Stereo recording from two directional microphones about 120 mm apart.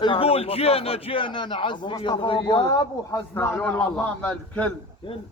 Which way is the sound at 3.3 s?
20° left (ahead or behind).